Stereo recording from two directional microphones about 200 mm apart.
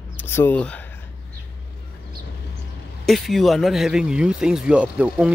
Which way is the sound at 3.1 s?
Centre (ahead or behind).